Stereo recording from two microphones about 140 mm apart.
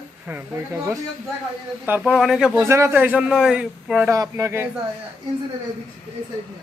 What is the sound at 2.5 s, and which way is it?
Speech, 20° right (ahead or behind).